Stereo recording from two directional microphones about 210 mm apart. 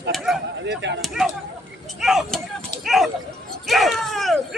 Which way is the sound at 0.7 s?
55° right (ahead or behind).